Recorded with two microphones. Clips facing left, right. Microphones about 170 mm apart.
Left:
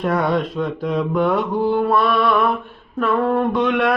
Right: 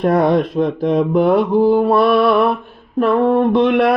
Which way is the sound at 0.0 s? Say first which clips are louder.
Right 5 dB; 35° right (ahead or behind).